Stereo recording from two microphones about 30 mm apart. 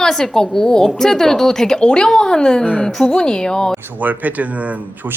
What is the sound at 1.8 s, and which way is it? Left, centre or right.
A woman's voice, left.